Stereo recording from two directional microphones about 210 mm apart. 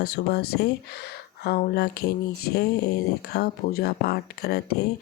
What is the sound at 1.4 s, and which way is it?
Speech, 45° left (ahead or behind).